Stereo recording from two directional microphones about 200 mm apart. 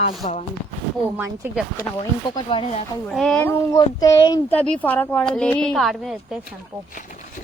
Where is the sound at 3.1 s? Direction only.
Centre (ahead or behind); by 4.4 s 20° left (ahead or behind).